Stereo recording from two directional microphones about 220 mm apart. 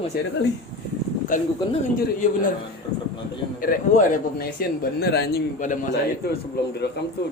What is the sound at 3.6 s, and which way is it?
A man's voice, 40° left (ahead or behind).